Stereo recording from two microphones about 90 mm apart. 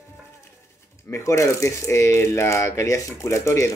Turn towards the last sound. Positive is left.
turn(degrees=35)  # may be behind; listen again after turning